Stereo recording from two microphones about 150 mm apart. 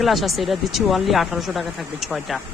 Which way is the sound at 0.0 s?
Centre (ahead or behind).